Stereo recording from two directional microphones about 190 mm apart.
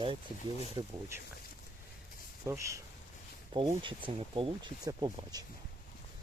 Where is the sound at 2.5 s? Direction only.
15° right (ahead or behind).